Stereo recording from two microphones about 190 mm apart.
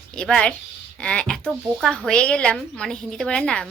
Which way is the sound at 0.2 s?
5° left (ahead or behind).